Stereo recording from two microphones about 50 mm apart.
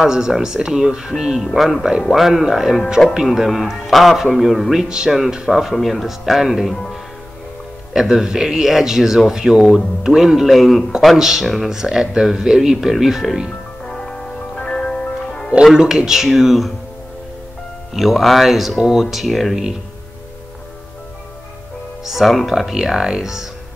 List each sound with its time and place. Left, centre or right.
0.0 s speech: centre
4.8 s speech: centre
5.5 s speech: centre
6.7 s speech: centre
7.9 s speech: centre
11.7 s speech: centre
13.8 s music: centre
15.6 s speech: centre
17.9 s speech: centre
22.0 s speech: centre